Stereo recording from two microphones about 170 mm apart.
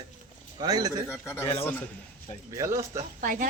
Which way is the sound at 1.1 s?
15° left (ahead or behind).